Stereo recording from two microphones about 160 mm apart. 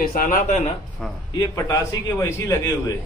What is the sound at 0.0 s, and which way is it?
Speech, 65° left (ahead or behind).